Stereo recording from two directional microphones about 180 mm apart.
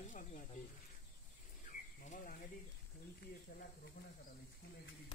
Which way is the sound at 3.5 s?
60° left (ahead or behind).